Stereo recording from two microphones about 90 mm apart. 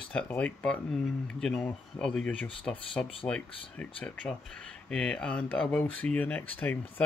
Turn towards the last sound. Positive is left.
turn(degrees=20)  # may be behind; listen again after turning